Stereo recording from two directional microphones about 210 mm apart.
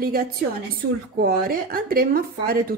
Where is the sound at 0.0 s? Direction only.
45° right (ahead or behind).